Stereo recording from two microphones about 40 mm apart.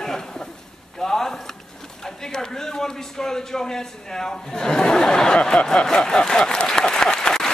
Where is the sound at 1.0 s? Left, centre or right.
Centre.